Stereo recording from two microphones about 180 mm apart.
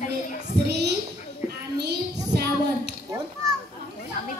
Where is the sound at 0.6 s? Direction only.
65° right (ahead or behind).